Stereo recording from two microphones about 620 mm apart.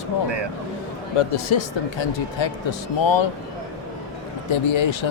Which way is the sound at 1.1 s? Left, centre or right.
Left.